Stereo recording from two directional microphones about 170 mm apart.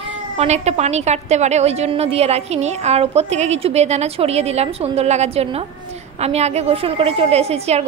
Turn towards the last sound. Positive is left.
turn(degrees=-40)  # may be behind; listen again after turning